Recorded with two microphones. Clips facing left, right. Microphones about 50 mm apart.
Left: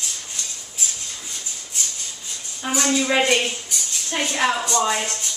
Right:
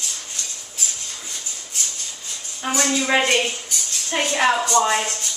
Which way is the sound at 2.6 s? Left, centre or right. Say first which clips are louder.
Right 1 dB; centre.